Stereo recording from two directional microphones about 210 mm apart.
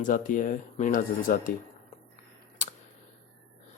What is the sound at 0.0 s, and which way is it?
Speech, 40° left (ahead or behind).